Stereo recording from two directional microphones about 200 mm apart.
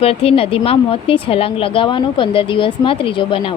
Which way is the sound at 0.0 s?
30° left (ahead or behind).